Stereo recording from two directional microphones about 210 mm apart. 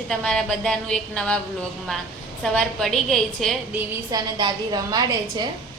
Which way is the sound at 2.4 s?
5° left (ahead or behind).